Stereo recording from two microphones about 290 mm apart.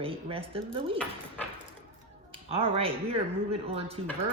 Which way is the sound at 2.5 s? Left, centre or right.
Centre.